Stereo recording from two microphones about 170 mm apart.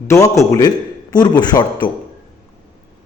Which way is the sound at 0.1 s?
15° left (ahead or behind).